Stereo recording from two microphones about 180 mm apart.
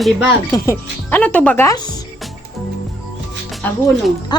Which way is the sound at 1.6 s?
20° left (ahead or behind).